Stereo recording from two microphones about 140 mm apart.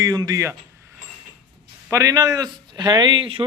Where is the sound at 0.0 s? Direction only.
25° right (ahead or behind).